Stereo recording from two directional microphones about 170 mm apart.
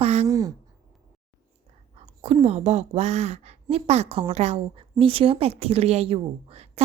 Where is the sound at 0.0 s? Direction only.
40° right (ahead or behind).